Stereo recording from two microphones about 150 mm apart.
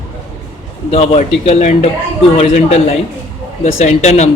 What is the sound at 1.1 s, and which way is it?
Speech, 45° left (ahead or behind).